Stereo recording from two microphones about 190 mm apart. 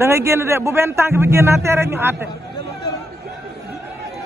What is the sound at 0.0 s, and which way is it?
Speech, 15° right (ahead or behind).